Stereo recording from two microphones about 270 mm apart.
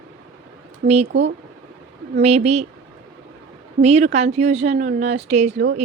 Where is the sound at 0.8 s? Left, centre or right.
Right.